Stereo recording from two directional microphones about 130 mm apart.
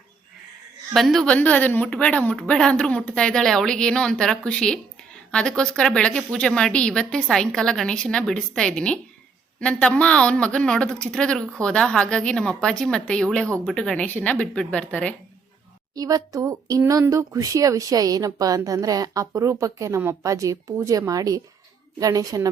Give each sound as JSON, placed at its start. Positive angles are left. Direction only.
{"t": 0.9, "sound": "a woman's voice", "side_deg": 0}
{"t": 16.0, "sound": "speech", "side_deg": -30}